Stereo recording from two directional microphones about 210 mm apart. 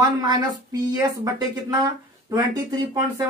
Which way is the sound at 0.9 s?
15° right (ahead or behind).